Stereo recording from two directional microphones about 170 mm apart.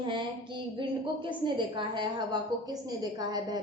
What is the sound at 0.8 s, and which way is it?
A woman's voice, 30° right (ahead or behind).